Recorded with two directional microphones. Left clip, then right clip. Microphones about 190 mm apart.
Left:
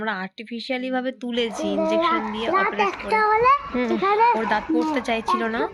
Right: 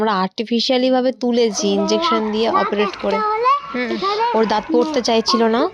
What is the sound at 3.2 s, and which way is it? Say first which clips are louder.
A child's voice: even; centre (ahead or behind).